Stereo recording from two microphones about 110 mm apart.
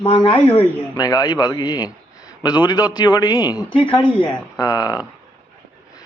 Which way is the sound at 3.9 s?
55° left (ahead or behind).